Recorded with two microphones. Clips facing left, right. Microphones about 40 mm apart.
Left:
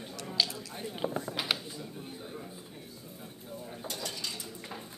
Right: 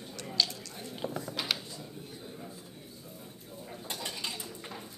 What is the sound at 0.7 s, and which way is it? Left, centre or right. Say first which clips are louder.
Speech: left 5 dB; centre.